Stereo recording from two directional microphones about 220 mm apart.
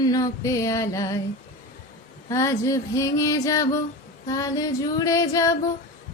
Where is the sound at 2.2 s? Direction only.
15° left (ahead or behind).